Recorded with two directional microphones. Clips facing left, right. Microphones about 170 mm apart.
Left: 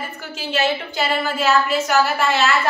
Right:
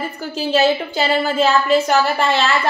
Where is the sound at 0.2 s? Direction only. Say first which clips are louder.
Right 6 dB; 35° right (ahead or behind).